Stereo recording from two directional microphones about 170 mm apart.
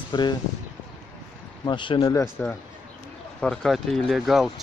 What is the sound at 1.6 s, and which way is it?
Speech, 30° left (ahead or behind).